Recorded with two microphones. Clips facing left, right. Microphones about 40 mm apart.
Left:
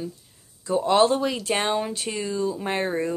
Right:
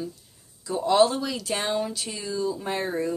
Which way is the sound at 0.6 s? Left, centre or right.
Left.